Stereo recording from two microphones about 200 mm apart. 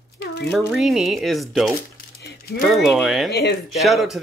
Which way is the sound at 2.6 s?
Centre (ahead or behind).